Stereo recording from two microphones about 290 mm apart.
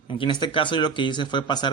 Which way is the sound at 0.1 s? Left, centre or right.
Centre.